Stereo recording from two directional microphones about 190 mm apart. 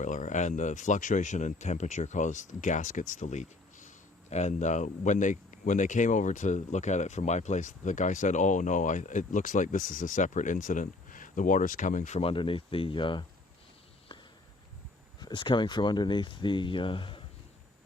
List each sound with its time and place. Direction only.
0.0 s speech: 40° left (ahead or behind)
14.1 s a sound: 25° left (ahead or behind)
15.2 s speech: 25° left (ahead or behind)